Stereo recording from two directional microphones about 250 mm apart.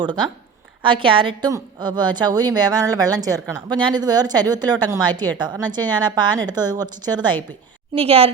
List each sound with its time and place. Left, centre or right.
0.8 s a woman's voice: centre